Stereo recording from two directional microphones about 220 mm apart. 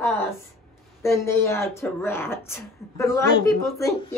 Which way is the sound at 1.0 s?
10° left (ahead or behind).